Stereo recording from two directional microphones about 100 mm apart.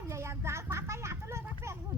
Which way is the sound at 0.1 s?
30° right (ahead or behind).